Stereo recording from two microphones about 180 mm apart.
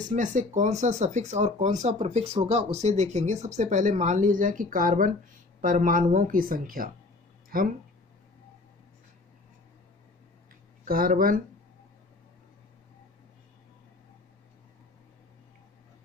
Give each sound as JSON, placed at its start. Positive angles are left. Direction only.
{"t": 0.1, "sound": "speech", "side_deg": -45}
{"t": 7.4, "sound": "a sound", "side_deg": -50}
{"t": 10.9, "sound": "speech", "side_deg": -55}